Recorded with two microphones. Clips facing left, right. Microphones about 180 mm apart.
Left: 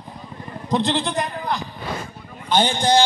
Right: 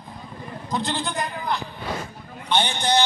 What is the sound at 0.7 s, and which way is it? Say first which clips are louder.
Speech: left 6 dB; 35° left (ahead or behind).